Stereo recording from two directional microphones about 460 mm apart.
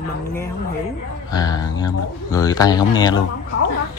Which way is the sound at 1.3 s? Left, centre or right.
Centre.